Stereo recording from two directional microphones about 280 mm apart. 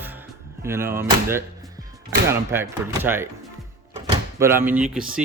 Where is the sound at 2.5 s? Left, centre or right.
Centre.